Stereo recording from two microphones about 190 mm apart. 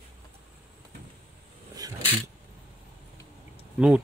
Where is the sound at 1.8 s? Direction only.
20° right (ahead or behind).